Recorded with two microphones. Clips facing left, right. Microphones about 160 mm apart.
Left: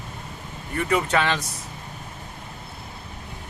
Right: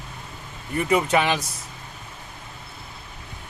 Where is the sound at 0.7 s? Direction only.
15° right (ahead or behind).